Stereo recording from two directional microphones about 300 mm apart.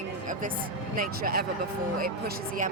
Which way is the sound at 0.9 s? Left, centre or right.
Right.